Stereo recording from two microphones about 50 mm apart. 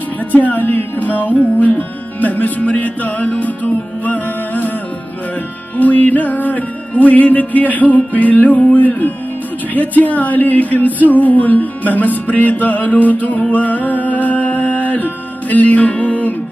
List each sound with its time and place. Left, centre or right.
0.3 s music: left
5.8 s music: left